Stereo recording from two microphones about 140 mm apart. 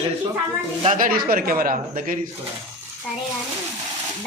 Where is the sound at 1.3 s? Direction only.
90° right; by 2.1 s 75° right (ahead or behind).